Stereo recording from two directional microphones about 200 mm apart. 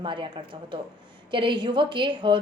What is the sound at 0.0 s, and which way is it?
Speech, 25° right (ahead or behind).